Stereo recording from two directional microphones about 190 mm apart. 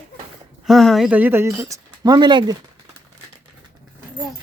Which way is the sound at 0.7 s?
Centre (ahead or behind).